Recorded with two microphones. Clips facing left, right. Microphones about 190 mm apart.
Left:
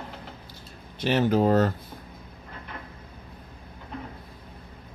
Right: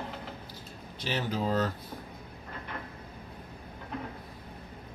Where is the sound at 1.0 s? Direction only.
60° left (ahead or behind).